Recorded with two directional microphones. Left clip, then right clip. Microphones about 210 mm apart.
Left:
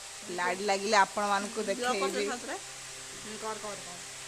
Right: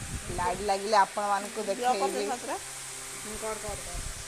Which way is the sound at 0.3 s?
15° left (ahead or behind).